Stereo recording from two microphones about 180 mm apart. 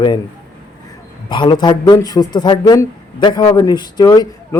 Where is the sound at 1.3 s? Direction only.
25° left (ahead or behind).